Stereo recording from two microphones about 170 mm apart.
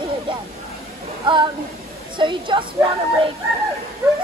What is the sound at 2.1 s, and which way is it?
Speech, 30° right (ahead or behind).